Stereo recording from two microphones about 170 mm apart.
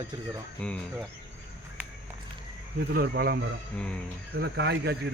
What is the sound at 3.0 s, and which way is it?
Speech, 65° right (ahead or behind).